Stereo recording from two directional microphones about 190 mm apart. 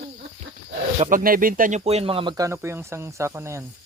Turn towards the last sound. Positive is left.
turn(degrees=-15)  # may be behind; listen again after turning